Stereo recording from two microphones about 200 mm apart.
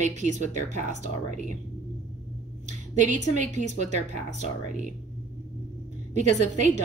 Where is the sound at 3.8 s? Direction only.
35° right (ahead or behind).